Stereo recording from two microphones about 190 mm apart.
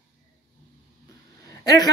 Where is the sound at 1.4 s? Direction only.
20° left (ahead or behind).